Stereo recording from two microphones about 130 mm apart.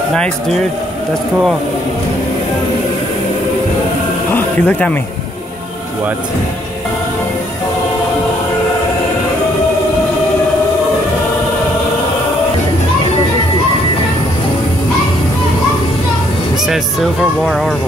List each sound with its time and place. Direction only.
4.3 s music: 15° left (ahead or behind)
16.6 s speech: centre (ahead or behind)